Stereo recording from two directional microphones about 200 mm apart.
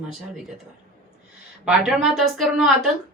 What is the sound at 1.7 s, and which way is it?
A woman's voice, centre (ahead or behind).